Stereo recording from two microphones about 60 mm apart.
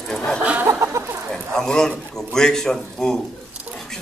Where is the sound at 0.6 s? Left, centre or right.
Right.